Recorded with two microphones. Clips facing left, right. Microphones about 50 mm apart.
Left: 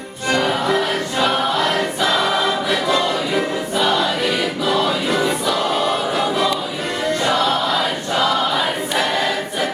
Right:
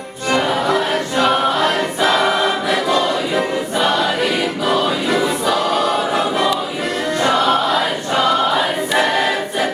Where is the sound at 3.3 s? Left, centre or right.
Centre.